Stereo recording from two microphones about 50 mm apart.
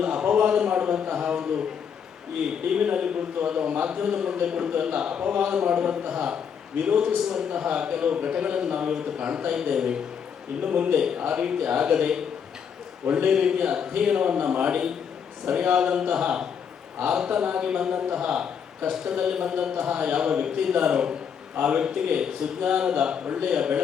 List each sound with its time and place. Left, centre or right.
0.0 s a sound: right
0.3 s a man's voice: centre
2.7 s a man's voice: right
5.2 s a man's voice: right
10.6 s a man's voice: right
11.2 s a man's voice: centre
13.1 s a man's voice: right
13.3 s a man's voice: centre
14.3 s a man's voice: right
23.2 s a man's voice: right
23.5 s a man's voice: centre